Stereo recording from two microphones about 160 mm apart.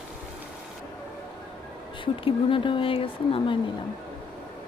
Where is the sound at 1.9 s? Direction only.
30° left (ahead or behind).